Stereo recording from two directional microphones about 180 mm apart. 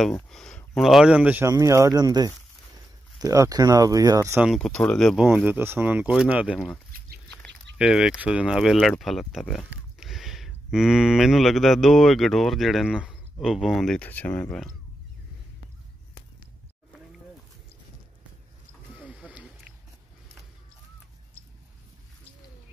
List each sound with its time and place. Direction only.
0.3 s speech: 5° left (ahead or behind); by 4.5 s 15° right (ahead or behind)
4.5 s speech: 5° left (ahead or behind)
6.5 s speech: 5° left (ahead or behind)
18.9 s a sound: 10° right (ahead or behind)